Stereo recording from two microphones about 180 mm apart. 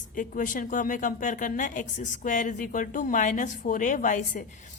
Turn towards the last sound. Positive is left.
turn(degrees=45)  # may be behind; listen again after turning